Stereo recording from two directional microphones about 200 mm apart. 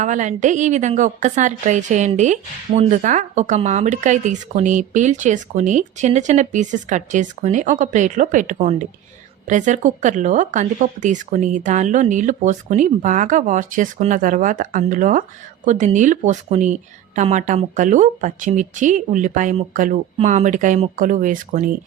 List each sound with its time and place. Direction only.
0.0 s a woman's voice: 40° right (ahead or behind)